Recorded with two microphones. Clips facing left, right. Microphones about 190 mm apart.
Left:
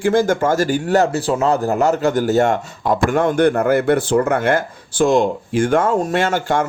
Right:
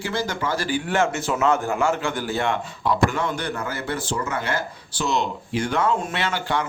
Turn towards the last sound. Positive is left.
turn(degrees=45)  # may be behind; listen again after turning